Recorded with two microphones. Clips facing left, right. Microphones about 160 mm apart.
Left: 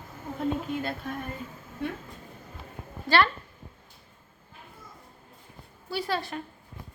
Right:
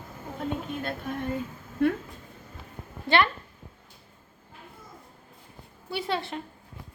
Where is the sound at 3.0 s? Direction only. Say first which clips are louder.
Even; 20° right (ahead or behind).